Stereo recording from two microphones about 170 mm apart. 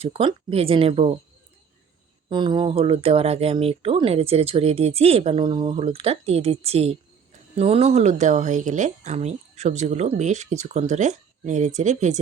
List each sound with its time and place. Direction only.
0.0 s speech: 35° right (ahead or behind)
2.3 s speech: 25° right (ahead or behind); by 12.2 s 45° right (ahead or behind)